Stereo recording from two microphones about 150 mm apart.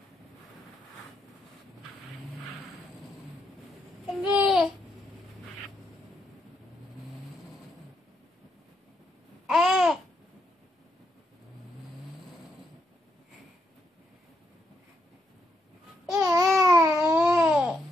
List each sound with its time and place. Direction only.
4.1 s a sound: 5° right (ahead or behind)
9.5 s babbling: centre (ahead or behind)
16.1 s babbling: 20° right (ahead or behind)
16.9 s babbling: 5° right (ahead or behind)